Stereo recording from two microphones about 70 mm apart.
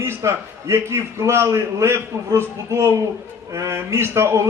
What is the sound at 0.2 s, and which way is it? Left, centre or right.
A man's voice, right.